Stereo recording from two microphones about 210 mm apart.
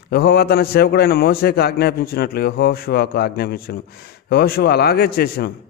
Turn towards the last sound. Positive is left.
turn(degrees=45)  # may be behind; listen again after turning